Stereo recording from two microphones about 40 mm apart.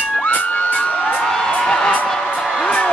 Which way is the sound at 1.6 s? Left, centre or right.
Centre.